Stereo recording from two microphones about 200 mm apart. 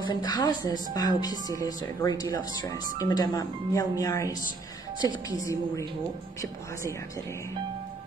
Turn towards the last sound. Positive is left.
turn(degrees=15)  # may be behind; listen again after turning